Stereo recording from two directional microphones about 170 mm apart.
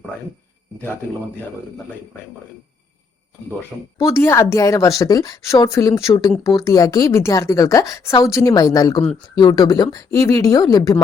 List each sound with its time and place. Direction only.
3.9 s a woman's voice: 15° left (ahead or behind)